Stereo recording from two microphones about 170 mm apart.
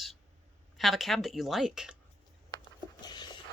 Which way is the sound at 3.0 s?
25° left (ahead or behind).